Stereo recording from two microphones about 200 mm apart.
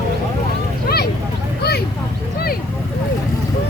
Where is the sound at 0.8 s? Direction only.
50° left (ahead or behind).